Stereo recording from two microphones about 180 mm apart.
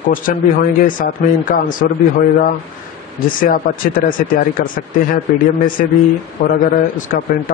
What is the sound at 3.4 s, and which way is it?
A man's voice, 55° left (ahead or behind).